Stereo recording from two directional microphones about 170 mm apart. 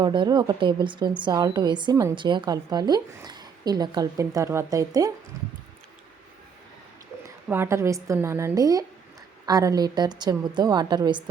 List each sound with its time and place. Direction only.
0.0 s a woman's voice: 25° right (ahead or behind)
7.4 s a woman's voice: 15° right (ahead or behind)